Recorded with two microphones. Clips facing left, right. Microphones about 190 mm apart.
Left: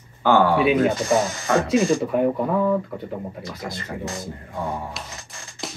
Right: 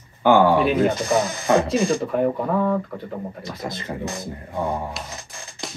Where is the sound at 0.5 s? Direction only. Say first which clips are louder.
Even; centre (ahead or behind).